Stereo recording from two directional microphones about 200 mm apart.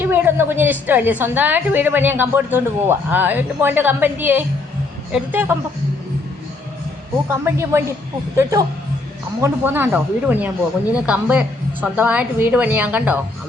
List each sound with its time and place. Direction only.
0.0 s a woman's voice: 10° right (ahead or behind)
7.3 s a woman's voice: 10° right (ahead or behind)